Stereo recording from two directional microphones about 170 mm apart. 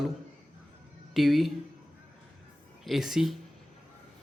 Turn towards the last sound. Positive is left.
turn(degrees=0)  # may be behind; listen again after turning